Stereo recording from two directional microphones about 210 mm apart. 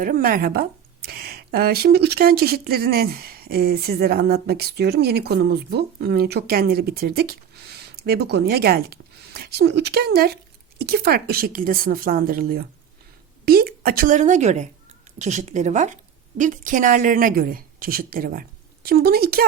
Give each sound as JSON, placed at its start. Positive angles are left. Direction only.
{"t": 0.0, "sound": "a woman's voice", "side_deg": -45}